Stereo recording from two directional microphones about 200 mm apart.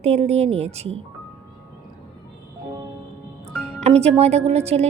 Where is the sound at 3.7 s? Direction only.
35° right (ahead or behind).